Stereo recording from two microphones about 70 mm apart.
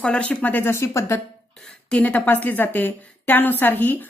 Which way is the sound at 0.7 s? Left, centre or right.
Left.